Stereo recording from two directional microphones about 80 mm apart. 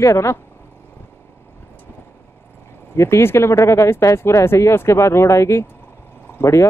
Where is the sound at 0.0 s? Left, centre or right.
Left.